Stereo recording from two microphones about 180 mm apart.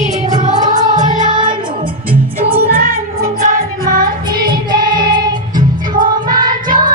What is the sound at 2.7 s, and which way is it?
Music, 55° right (ahead or behind).